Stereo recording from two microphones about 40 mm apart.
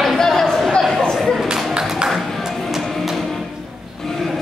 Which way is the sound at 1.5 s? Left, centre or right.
Centre.